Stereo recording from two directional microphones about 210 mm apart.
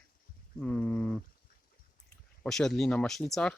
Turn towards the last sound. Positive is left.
turn(degrees=5)  # may be behind; listen again after turning